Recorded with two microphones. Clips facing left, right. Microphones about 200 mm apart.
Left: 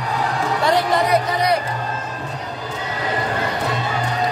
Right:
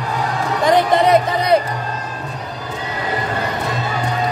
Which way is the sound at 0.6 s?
20° right (ahead or behind).